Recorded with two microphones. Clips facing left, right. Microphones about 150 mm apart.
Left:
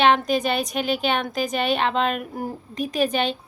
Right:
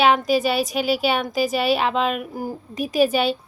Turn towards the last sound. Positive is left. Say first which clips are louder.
# right 4 dB
turn(degrees=-5)  # may be behind; listen again after turning